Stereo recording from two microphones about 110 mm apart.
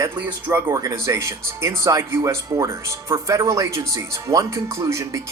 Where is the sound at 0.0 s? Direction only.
20° right (ahead or behind).